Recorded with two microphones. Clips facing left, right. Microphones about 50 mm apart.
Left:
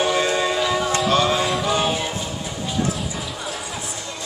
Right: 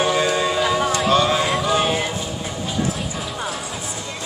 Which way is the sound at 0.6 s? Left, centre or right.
Centre.